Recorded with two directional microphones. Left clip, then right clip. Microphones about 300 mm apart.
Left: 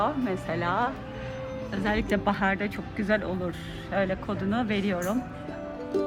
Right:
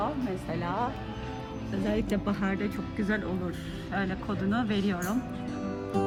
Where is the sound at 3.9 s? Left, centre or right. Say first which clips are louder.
Left 5 dB; left.